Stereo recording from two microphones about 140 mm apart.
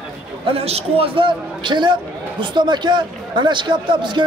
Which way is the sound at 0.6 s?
45° right (ahead or behind).